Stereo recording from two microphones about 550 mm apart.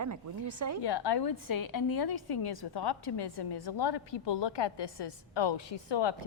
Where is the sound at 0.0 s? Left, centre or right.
Right.